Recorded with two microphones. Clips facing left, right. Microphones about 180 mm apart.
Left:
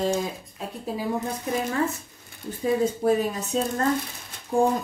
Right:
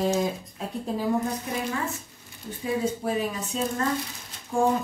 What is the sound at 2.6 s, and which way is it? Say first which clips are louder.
Speech: left 4 dB; 40° left (ahead or behind).